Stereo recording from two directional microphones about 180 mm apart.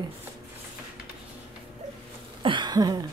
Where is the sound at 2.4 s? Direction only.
25° right (ahead or behind).